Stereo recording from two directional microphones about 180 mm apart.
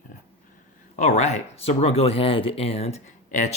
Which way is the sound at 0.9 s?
40° left (ahead or behind).